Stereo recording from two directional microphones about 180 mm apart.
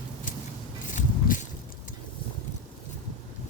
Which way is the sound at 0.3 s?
50° left (ahead or behind).